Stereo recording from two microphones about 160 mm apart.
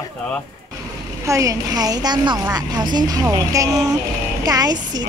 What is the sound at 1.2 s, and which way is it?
Speech, 20° right (ahead or behind).